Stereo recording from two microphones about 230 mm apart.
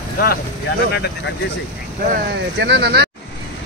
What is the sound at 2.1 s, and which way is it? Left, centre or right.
Speech, right.